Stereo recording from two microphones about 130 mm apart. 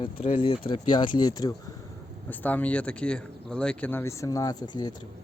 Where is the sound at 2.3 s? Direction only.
15° left (ahead or behind); by 4.9 s 35° left (ahead or behind).